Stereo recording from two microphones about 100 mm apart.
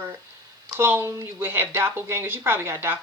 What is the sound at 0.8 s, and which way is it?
Speech, 20° right (ahead or behind).